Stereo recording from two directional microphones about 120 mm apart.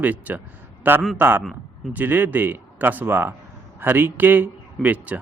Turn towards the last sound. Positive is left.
turn(degrees=-15)  # may be behind; listen again after turning